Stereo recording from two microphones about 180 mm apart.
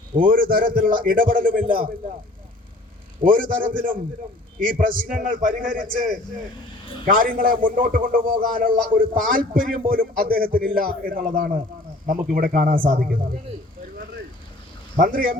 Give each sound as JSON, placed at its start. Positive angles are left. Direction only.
{"t": 0.3, "sound": "a man's voice", "side_deg": -50}
{"t": 1.6, "sound": "a man's voice", "side_deg": -30}
{"t": 3.2, "sound": "a man's voice", "side_deg": -50}
{"t": 7.0, "sound": "a man's voice", "side_deg": -50}
{"t": 14.9, "sound": "a man's voice", "side_deg": -50}